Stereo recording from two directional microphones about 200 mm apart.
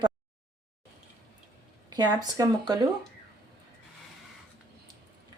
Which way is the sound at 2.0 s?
20° right (ahead or behind).